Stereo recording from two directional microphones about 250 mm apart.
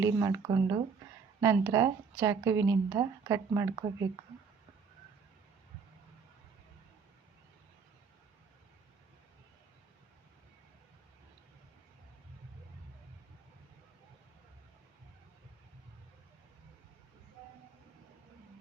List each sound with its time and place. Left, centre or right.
0.0 s speech: centre